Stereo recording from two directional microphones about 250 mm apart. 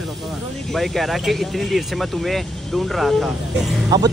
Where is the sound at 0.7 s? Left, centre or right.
Centre.